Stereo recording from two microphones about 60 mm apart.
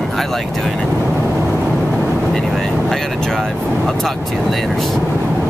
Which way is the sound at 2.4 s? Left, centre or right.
Centre.